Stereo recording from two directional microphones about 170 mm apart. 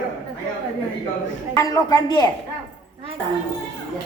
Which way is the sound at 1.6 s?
20° left (ahead or behind).